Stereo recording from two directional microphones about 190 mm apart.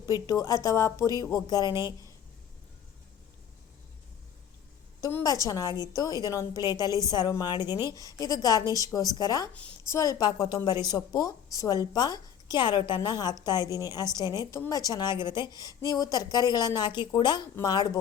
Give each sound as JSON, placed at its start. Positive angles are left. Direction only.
{"t": 0.0, "sound": "a woman's voice", "side_deg": 20}
{"t": 4.9, "sound": "a woman's voice", "side_deg": 20}
{"t": 7.7, "sound": "speech", "side_deg": -15}
{"t": 7.9, "sound": "speech", "side_deg": 20}